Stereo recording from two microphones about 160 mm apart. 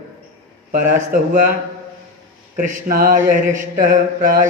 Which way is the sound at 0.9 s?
50° right (ahead or behind).